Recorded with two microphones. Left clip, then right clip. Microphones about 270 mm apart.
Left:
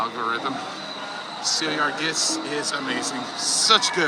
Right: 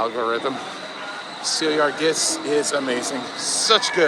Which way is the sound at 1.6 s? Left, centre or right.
Centre.